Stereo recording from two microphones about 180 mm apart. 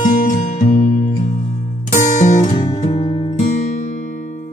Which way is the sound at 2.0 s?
40° left (ahead or behind).